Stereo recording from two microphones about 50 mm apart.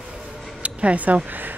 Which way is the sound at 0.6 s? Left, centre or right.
Right.